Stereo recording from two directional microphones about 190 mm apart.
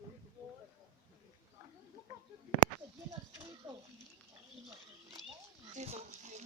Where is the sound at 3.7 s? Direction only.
25° right (ahead or behind).